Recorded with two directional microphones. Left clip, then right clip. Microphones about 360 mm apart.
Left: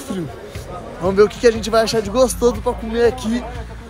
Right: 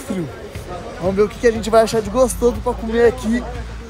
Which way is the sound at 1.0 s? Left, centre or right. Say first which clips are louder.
Left 3 dB; centre.